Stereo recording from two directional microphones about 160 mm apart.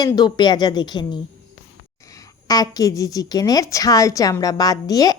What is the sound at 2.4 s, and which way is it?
Speech, 25° left (ahead or behind).